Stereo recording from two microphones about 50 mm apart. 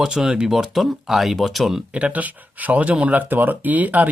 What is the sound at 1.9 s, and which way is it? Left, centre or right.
Speech, right.